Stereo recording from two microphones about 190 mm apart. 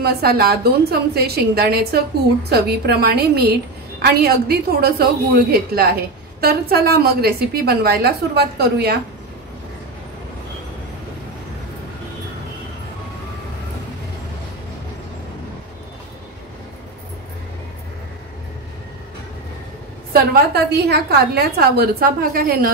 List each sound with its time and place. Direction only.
0.0 s a woman's voice: 55° right (ahead or behind)
20.1 s a woman's voice: 55° right (ahead or behind)